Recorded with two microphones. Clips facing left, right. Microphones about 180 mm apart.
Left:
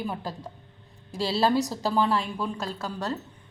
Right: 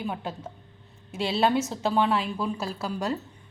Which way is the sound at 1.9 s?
Centre (ahead or behind).